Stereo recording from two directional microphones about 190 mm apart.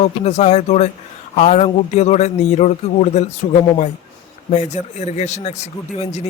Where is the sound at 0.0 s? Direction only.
35° left (ahead or behind).